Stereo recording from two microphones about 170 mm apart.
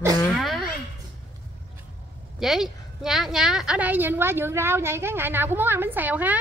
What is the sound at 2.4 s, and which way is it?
A woman's voice, centre (ahead or behind).